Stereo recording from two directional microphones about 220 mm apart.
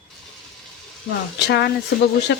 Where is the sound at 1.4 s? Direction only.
50° left (ahead or behind).